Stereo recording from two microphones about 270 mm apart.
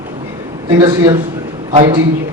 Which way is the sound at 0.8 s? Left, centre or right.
Centre.